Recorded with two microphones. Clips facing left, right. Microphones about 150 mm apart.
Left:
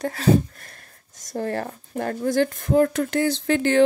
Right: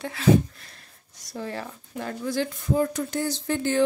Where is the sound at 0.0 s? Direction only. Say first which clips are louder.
Left 1 dB; 40° left (ahead or behind).